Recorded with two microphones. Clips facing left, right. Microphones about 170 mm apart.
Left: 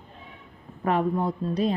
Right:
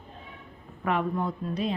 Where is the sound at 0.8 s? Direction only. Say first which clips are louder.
Left 3 dB; 35° left (ahead or behind).